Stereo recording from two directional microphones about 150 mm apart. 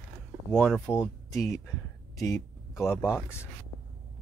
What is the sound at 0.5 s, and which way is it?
Speech, 5° left (ahead or behind).